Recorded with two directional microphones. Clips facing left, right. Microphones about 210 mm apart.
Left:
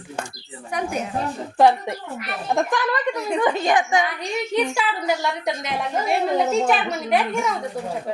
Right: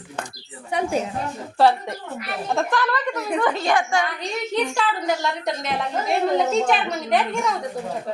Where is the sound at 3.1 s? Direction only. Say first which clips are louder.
Left 1 dB; centre (ahead or behind).